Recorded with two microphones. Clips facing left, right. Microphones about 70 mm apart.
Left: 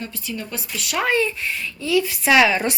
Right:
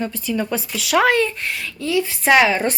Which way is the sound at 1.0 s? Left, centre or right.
Right.